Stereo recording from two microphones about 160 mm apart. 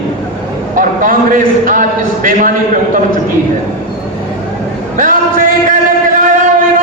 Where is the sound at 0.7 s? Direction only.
55° right (ahead or behind).